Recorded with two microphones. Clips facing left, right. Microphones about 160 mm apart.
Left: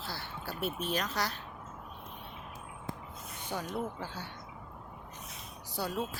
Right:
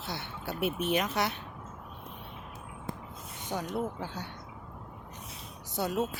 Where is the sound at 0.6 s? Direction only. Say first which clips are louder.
Right 5 dB; 60° right (ahead or behind).